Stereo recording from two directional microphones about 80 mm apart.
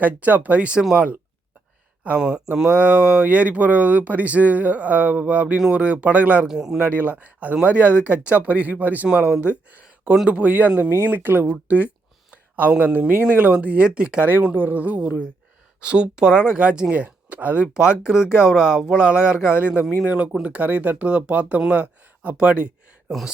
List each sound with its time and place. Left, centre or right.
0.0 s speech: right
2.0 s speech: centre
6.5 s speech: centre